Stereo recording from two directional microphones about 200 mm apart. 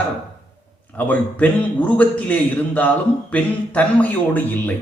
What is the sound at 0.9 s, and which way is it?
A man's voice, 5° left (ahead or behind).